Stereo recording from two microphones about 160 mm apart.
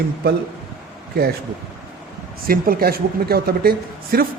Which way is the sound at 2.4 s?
65° right (ahead or behind).